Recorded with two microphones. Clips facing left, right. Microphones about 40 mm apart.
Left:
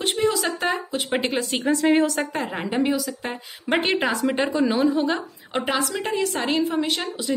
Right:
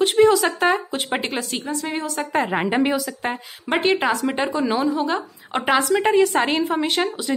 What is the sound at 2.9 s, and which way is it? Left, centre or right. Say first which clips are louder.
Speech: right 3 dB; right.